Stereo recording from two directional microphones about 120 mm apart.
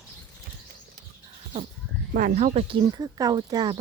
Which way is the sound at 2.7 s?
40° right (ahead or behind).